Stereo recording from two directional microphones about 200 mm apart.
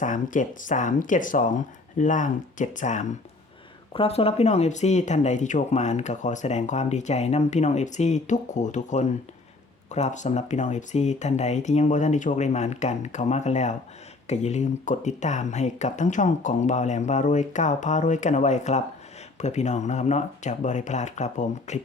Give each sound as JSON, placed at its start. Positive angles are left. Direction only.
{"t": 0.0, "sound": "speech", "side_deg": 40}